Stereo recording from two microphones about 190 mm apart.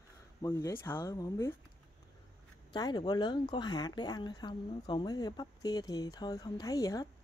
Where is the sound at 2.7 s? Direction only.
20° left (ahead or behind).